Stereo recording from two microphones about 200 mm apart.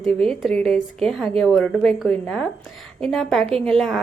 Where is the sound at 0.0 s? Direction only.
5° left (ahead or behind).